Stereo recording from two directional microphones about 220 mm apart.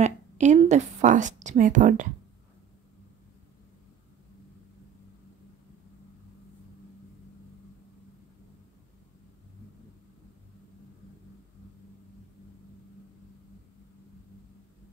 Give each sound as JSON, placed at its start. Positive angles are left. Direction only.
{"t": 0.0, "sound": "a woman's voice", "side_deg": -30}